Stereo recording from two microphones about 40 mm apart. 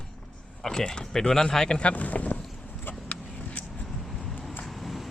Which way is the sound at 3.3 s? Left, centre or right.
Left.